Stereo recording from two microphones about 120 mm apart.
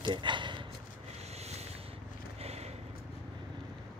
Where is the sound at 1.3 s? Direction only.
60° right (ahead or behind).